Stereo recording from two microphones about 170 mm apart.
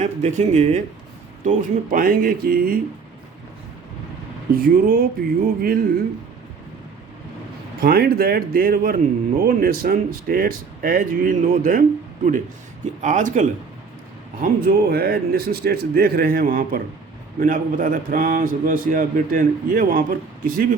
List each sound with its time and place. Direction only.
0.0 s a man's voice: 45° right (ahead or behind); by 2.8 s 60° right (ahead or behind)
4.5 s speech: 60° right (ahead or behind)
7.8 s a man's voice: 65° right (ahead or behind); by 13.4 s 45° right (ahead or behind)
14.4 s a man's voice: 60° right (ahead or behind)